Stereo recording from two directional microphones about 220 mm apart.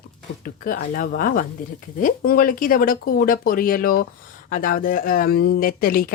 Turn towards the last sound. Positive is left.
turn(degrees=40)  # may be behind; listen again after turning